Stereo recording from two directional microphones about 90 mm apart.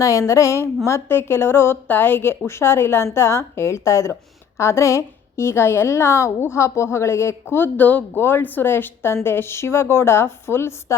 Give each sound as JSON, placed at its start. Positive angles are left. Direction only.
{"t": 0.0, "sound": "a woman's voice", "side_deg": 35}